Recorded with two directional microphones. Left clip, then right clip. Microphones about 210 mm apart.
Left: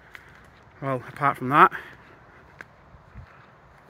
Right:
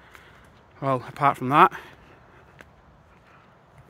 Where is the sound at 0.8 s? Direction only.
25° right (ahead or behind).